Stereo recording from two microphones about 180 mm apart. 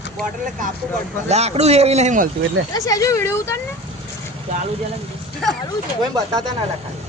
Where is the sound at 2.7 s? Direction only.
20° left (ahead or behind).